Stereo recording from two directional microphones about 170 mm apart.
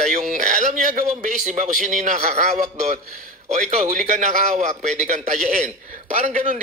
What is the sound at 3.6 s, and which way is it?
A man's voice, 50° right (ahead or behind).